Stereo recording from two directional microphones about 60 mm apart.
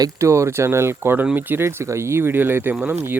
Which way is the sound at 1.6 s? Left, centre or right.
Right.